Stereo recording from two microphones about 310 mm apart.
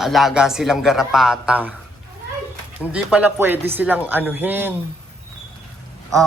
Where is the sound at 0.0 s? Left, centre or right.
Centre.